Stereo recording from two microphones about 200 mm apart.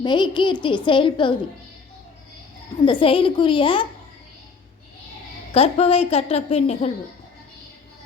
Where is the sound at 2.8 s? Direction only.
25° left (ahead or behind).